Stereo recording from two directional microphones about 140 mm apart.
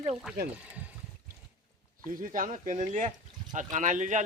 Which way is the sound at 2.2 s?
70° right (ahead or behind).